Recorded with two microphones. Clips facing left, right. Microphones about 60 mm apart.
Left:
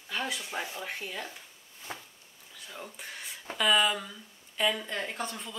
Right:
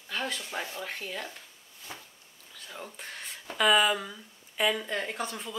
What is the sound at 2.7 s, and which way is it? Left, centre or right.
Speech, centre.